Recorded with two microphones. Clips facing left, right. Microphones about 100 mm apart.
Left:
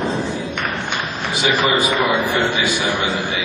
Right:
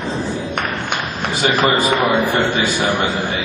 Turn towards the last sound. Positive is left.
turn(degrees=-45)  # may be behind; listen again after turning